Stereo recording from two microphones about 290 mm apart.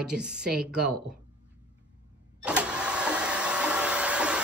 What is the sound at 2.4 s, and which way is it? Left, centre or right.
Vehicle, centre.